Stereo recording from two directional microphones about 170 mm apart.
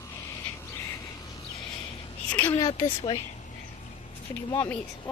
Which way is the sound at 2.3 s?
10° left (ahead or behind).